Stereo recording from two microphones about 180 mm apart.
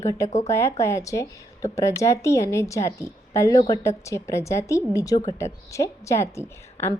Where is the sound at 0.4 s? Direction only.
15° left (ahead or behind).